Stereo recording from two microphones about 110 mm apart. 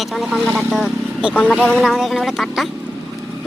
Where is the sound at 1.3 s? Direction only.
15° left (ahead or behind).